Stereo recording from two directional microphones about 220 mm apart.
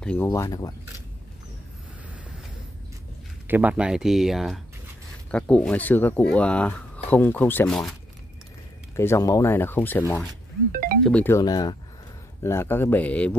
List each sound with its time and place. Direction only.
0.0 s speech: 10° left (ahead or behind)
3.4 s speech: 10° right (ahead or behind)
8.9 s speech: 10° left (ahead or behind)
10.7 s speech: 40° right (ahead or behind)
11.1 s speech: 10° left (ahead or behind)